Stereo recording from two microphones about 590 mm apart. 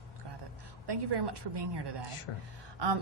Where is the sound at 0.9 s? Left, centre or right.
Right.